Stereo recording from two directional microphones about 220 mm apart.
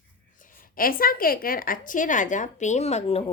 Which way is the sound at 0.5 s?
40° left (ahead or behind).